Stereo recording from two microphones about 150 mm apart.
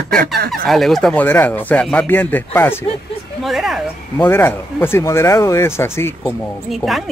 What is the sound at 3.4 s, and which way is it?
Speech, centre (ahead or behind).